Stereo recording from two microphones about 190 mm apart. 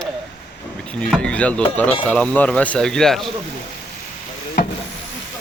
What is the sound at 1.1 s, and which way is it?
Speech, 5° left (ahead or behind).